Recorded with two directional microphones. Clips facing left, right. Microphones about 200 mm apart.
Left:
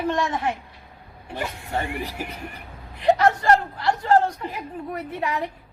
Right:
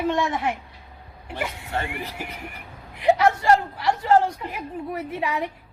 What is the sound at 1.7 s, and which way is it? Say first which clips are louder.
Speech: left 3 dB; 15° left (ahead or behind).